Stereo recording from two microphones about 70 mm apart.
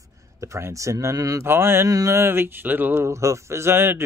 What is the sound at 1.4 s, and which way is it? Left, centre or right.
Speech, right.